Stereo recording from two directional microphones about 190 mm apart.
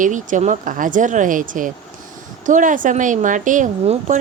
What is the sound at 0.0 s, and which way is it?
A woman's voice, 40° right (ahead or behind).